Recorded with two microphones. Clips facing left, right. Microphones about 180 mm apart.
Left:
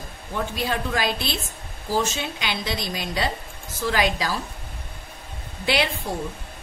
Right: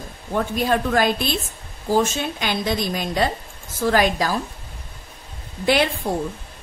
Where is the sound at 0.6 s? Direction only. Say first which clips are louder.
Right 7 dB; 50° right (ahead or behind).